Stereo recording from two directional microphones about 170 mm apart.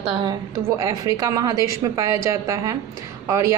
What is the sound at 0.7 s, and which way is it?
A woman's voice, 20° right (ahead or behind).